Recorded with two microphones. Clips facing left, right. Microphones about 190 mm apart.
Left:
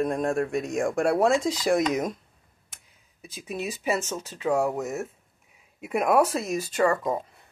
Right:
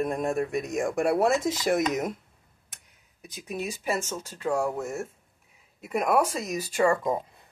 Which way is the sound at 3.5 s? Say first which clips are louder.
Left 1 dB; centre (ahead or behind).